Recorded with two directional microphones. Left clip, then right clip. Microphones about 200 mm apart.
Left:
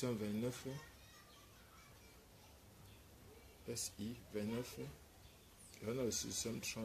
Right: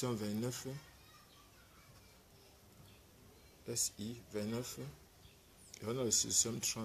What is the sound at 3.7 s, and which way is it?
Speech, 20° right (ahead or behind).